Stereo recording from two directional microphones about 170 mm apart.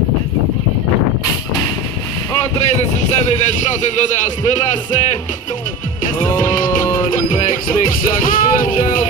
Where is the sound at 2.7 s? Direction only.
45° left (ahead or behind).